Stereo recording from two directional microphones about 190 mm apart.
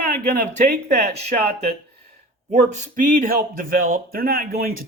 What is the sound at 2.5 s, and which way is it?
Speech, 40° right (ahead or behind).